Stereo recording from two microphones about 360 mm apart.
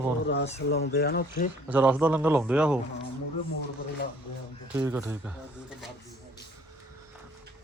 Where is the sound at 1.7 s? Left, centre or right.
Centre.